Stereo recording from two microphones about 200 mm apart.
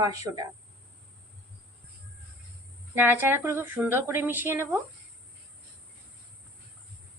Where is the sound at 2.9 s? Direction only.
10° right (ahead or behind).